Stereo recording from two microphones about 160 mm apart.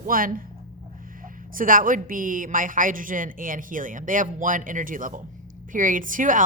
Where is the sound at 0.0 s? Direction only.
60° right (ahead or behind).